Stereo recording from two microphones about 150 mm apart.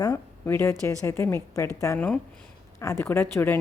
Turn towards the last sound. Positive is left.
turn(degrees=15)  # may be behind; listen again after turning